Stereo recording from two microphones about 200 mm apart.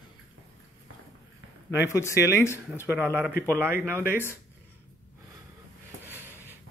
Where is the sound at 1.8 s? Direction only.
15° left (ahead or behind).